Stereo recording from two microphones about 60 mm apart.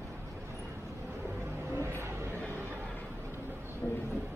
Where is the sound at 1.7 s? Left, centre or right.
Right.